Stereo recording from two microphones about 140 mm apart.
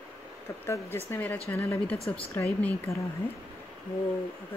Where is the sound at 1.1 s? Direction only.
10° left (ahead or behind).